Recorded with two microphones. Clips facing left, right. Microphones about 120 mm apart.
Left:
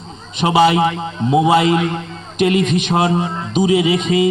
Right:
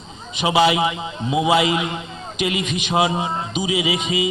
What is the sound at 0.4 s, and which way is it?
Speech, 45° left (ahead or behind).